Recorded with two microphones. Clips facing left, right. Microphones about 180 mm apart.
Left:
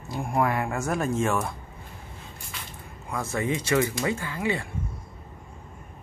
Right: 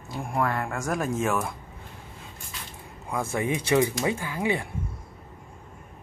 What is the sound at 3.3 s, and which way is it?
Speech, 15° right (ahead or behind).